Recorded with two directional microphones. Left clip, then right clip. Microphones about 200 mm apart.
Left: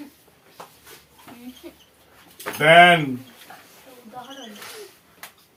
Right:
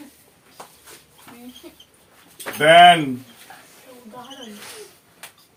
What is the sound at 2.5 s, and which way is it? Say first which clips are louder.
Speech: right 2 dB; 20° right (ahead or behind).